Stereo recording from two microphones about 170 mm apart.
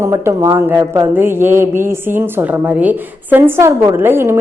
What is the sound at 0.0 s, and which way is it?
Speech, 15° right (ahead or behind).